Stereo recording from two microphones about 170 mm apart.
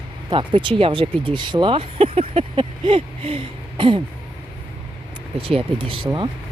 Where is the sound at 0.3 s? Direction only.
30° right (ahead or behind).